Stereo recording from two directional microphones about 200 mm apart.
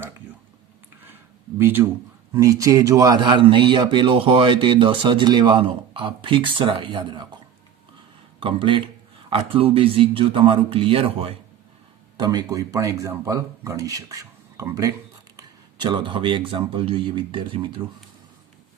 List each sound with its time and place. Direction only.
1.5 s a man's voice: 10° right (ahead or behind)
8.4 s a man's voice: 25° right (ahead or behind)